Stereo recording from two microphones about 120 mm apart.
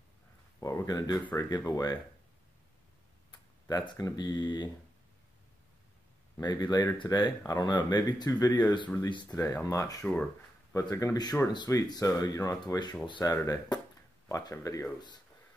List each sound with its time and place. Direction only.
0.6 s speech: 25° left (ahead or behind)
3.6 s speech: 35° left (ahead or behind)
6.4 s speech: 35° left (ahead or behind)